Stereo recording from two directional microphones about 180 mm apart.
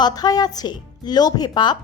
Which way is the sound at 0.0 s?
20° left (ahead or behind).